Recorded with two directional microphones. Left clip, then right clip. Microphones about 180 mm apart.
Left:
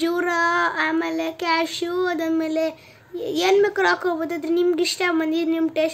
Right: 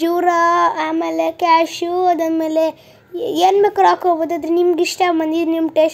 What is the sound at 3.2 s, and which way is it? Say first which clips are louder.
A woman's voice: right 5 dB; 15° right (ahead or behind).